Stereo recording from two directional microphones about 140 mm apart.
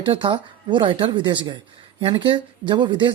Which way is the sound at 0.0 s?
35° right (ahead or behind).